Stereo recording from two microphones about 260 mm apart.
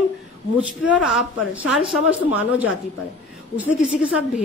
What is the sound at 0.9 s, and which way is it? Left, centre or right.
A woman's voice, centre.